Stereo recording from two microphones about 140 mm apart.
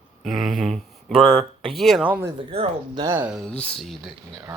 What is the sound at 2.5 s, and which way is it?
Speech, 45° right (ahead or behind).